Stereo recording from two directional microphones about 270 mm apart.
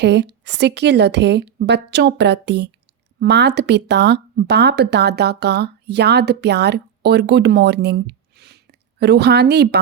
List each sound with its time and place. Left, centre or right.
0.0 s speech: right